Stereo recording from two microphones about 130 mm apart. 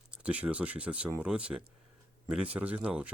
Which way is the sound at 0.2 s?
10° right (ahead or behind).